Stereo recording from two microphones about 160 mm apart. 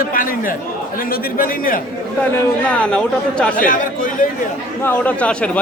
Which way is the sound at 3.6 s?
60° left (ahead or behind).